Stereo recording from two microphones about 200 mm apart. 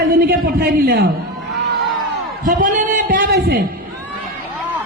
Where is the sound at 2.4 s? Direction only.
40° right (ahead or behind).